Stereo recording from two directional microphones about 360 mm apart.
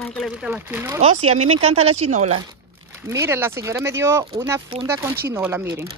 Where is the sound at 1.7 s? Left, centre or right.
Centre.